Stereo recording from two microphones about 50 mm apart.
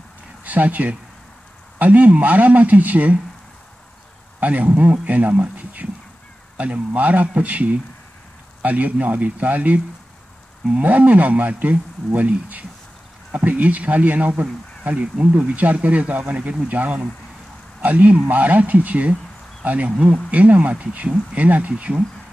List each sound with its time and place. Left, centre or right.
0.4 s speech: right
4.4 s speech: right